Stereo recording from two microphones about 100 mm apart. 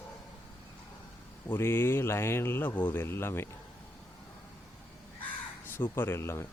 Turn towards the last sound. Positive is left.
turn(degrees=25)  # may be behind; listen again after turning